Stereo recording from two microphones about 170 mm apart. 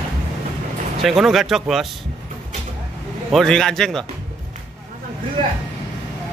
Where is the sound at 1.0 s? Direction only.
Centre (ahead or behind).